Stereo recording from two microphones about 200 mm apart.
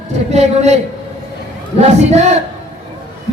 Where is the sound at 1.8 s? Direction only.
35° right (ahead or behind).